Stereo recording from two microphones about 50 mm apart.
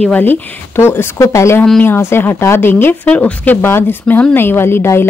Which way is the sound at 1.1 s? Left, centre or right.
Left.